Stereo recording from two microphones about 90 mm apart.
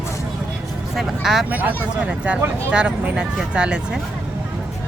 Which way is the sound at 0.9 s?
5° right (ahead or behind).